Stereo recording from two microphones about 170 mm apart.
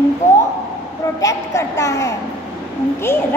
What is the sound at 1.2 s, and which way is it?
A woman's voice, 20° left (ahead or behind).